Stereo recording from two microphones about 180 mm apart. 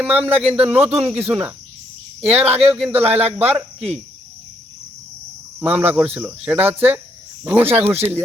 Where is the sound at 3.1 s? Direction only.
35° right (ahead or behind).